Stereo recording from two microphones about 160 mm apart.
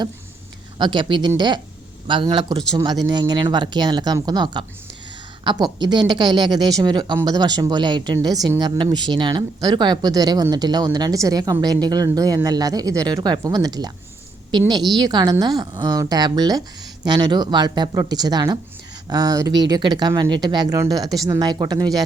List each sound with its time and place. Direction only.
0.8 s a man's voice: 30° right (ahead or behind)